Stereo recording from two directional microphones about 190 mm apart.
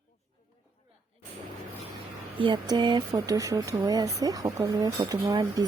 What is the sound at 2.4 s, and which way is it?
Speech, 25° right (ahead or behind).